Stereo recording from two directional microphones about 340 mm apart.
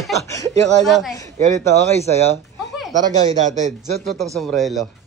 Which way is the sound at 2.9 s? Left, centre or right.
Right.